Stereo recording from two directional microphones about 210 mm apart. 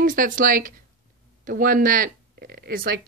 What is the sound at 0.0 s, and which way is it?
A woman's voice, 40° right (ahead or behind).